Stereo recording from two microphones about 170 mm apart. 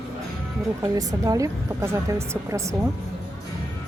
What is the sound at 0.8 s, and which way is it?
Speech, 20° right (ahead or behind).